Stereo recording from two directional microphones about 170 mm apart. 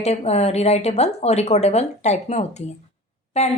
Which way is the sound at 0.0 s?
40° left (ahead or behind).